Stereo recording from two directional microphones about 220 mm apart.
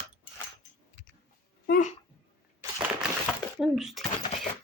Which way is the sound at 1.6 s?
40° left (ahead or behind).